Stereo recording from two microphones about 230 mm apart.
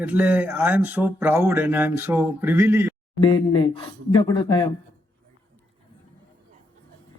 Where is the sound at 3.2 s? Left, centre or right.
Centre.